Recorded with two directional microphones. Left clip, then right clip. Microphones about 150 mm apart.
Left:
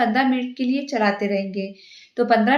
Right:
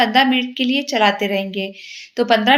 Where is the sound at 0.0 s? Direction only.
20° right (ahead or behind).